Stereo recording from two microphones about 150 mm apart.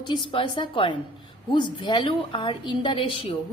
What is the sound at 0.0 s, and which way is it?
A woman's voice, 35° left (ahead or behind).